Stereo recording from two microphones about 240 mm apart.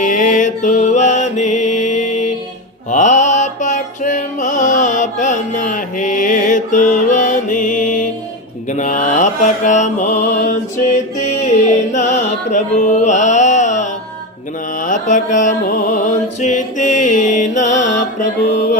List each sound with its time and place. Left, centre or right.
0.0 s music: left
8.7 s mantra: left
11.2 s music: left
16.0 s mantra: left